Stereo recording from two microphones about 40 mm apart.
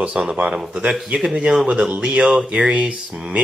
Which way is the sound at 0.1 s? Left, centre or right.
Centre.